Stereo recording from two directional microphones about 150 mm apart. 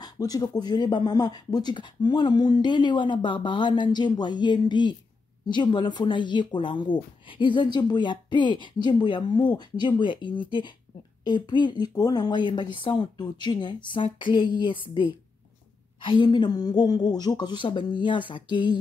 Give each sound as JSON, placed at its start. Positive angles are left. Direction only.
{"t": 0.0, "sound": "speech", "side_deg": 25}